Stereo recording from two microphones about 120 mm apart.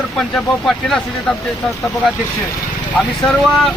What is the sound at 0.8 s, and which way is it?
Speech, 5° left (ahead or behind).